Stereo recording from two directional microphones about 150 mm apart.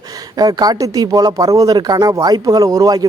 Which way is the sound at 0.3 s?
25° right (ahead or behind).